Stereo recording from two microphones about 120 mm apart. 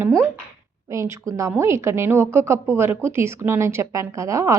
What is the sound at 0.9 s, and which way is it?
A woman's voice, 25° right (ahead or behind).